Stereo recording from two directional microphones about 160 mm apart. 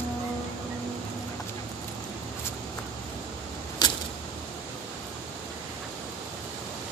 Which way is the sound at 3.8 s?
25° left (ahead or behind).